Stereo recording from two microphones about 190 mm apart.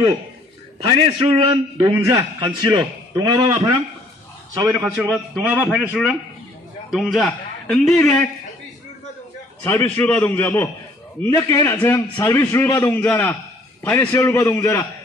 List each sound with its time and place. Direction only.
0.8 s a man's voice: 30° right (ahead or behind)
2.0 s a man's voice: 15° right (ahead or behind)
4.7 s a man's voice: 15° right (ahead or behind); by 8.2 s centre (ahead or behind)
9.6 s a man's voice: 10° left (ahead or behind)